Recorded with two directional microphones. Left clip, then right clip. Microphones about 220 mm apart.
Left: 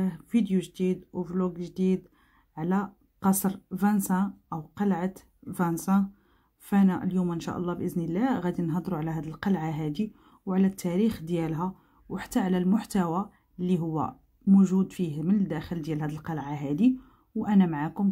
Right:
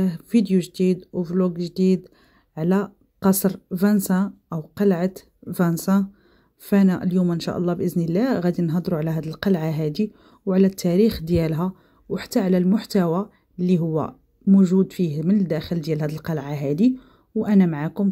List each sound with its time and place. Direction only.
0.0 s speech: 20° right (ahead or behind)